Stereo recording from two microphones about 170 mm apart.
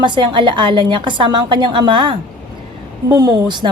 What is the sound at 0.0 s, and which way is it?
A woman's voice, 25° right (ahead or behind).